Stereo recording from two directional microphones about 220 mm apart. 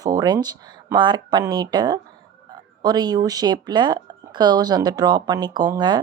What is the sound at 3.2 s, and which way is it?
Speech, 15° right (ahead or behind).